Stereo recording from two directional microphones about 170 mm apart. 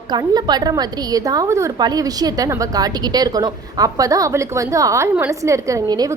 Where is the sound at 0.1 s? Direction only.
25° right (ahead or behind).